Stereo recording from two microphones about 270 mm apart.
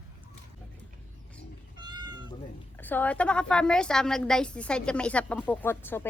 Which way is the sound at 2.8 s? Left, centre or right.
Centre.